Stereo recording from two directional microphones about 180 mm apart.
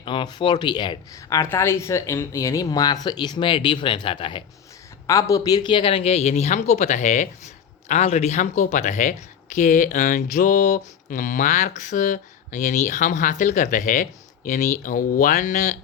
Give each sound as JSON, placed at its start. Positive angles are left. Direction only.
{"t": 0.0, "sound": "speech", "side_deg": 25}
{"t": 5.0, "sound": "speech", "side_deg": 20}
{"t": 9.6, "sound": "a sound", "side_deg": 45}